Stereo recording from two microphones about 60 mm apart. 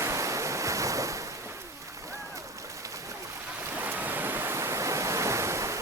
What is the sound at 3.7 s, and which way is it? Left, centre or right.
Waves, right.